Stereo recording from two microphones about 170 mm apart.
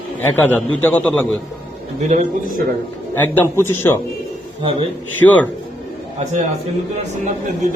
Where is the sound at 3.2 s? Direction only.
10° left (ahead or behind).